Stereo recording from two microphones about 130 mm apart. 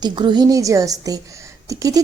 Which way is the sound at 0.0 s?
35° right (ahead or behind).